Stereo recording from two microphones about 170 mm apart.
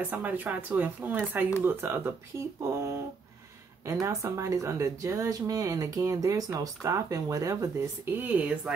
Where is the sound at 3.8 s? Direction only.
20° right (ahead or behind).